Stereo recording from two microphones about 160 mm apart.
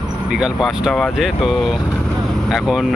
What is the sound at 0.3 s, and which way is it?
Speech, 5° right (ahead or behind).